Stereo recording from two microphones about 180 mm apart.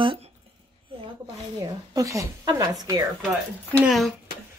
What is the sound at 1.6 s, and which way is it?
A woman's voice, 20° right (ahead or behind).